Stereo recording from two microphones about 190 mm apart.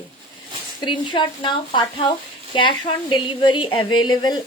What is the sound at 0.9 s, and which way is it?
Speech, 25° left (ahead or behind).